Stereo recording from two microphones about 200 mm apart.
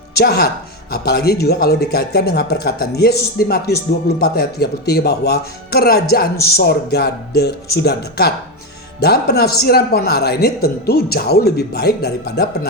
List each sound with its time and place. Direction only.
0.1 s speech: 55° left (ahead or behind)